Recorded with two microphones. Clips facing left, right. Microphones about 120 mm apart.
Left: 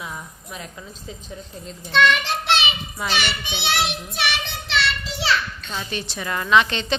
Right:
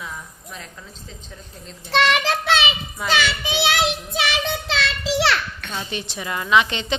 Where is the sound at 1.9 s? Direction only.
80° right.